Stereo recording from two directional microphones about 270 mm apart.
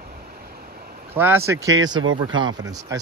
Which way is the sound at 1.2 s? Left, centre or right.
Centre.